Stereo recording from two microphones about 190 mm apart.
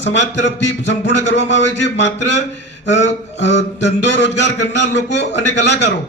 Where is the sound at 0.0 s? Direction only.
70° left (ahead or behind).